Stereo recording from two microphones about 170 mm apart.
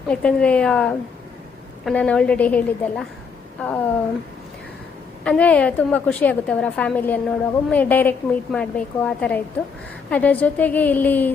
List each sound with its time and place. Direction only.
0.1 s a woman's voice: 5° left (ahead or behind)
5.2 s a woman's voice: 5° left (ahead or behind)